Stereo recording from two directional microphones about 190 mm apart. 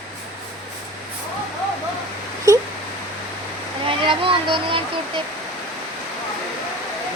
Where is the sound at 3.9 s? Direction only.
25° right (ahead or behind).